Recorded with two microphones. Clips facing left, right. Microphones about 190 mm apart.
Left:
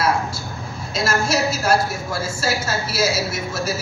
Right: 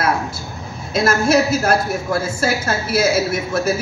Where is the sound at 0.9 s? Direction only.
55° right (ahead or behind).